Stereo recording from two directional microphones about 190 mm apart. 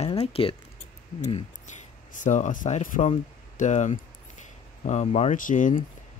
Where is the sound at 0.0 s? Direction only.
30° left (ahead or behind).